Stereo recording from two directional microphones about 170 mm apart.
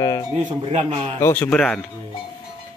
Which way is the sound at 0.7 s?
40° right (ahead or behind).